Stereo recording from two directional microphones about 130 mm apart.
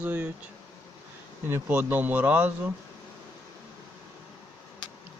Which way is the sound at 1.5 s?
20° right (ahead or behind).